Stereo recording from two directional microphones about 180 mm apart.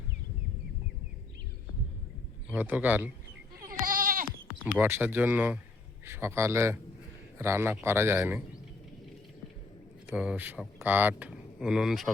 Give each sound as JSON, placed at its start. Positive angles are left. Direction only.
{"t": 2.5, "sound": "a man's voice", "side_deg": -10}
{"t": 3.7, "sound": "goat", "side_deg": -50}
{"t": 4.8, "sound": "a man's voice", "side_deg": -10}
{"t": 10.1, "sound": "speech", "side_deg": -5}